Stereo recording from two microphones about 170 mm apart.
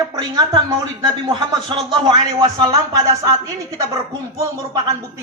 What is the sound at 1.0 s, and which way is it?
Speech, 25° right (ahead or behind).